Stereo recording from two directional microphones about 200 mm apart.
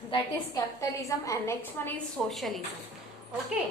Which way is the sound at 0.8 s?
15° left (ahead or behind).